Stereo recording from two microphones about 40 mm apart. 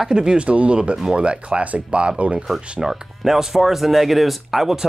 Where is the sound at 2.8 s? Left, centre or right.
Centre.